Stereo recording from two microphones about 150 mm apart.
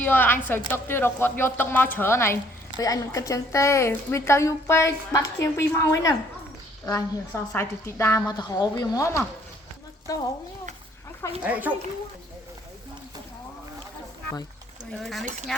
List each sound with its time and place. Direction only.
0.0 s a woman's voice: 10° left (ahead or behind)
11.4 s a child's voice: 10° right (ahead or behind)
14.9 s speech: centre (ahead or behind)